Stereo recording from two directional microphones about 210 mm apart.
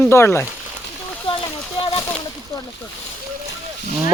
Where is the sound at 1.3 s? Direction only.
25° left (ahead or behind).